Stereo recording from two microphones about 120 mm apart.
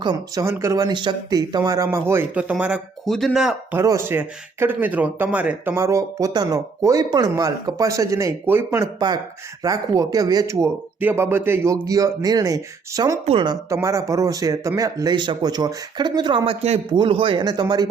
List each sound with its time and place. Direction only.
0.0 s speech: 40° right (ahead or behind)
0.4 s speech: 20° right (ahead or behind)
3.1 s speech: centre (ahead or behind)
3.7 s speech: 20° right (ahead or behind)